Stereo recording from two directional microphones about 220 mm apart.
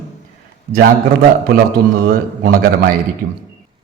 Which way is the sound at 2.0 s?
40° right (ahead or behind).